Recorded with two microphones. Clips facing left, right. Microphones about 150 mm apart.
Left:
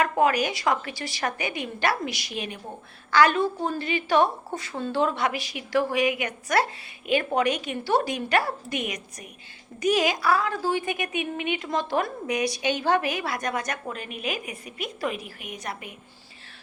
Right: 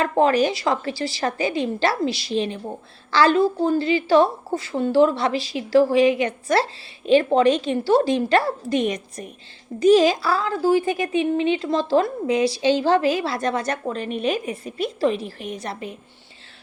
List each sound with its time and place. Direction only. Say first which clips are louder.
0.0 s a woman's voice: right 4 dB; 30° right (ahead or behind)